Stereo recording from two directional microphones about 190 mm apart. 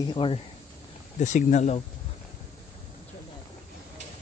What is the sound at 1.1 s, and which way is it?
Speech, 40° left (ahead or behind).